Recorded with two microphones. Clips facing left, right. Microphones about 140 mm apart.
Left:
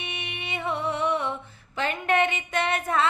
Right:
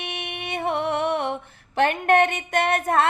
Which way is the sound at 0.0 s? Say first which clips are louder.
Right 4 dB; 65° right (ahead or behind).